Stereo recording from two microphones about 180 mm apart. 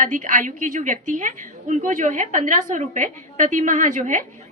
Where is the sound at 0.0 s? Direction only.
45° right (ahead or behind).